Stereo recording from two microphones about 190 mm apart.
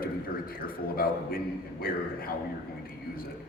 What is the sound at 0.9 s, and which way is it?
A man's voice, 50° left (ahead or behind).